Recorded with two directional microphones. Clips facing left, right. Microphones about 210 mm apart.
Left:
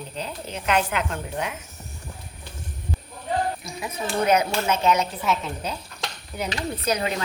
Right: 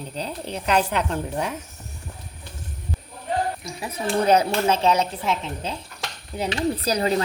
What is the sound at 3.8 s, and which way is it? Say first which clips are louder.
Speech: right 3 dB; 30° right (ahead or behind).